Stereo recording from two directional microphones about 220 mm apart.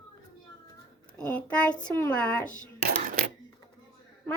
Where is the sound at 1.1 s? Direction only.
5° left (ahead or behind).